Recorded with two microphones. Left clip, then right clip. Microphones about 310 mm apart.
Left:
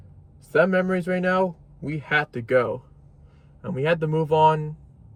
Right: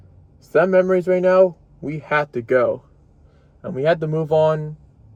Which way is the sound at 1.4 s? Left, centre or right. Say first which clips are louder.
Right 9 dB; centre.